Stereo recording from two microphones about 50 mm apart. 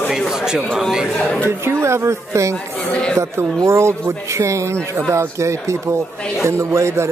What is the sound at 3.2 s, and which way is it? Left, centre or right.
Speech, right.